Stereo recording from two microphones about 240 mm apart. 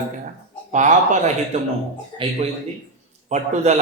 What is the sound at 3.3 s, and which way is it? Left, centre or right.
Speech, right.